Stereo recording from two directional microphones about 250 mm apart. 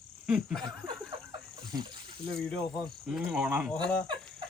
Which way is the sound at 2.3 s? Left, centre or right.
Centre.